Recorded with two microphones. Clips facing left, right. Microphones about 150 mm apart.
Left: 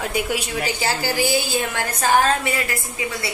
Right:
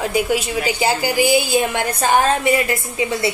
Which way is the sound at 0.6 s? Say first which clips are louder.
Right 5 dB; 15° right (ahead or behind).